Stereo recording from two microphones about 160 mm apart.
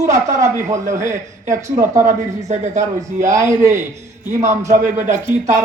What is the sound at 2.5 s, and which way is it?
Speech, 50° right (ahead or behind).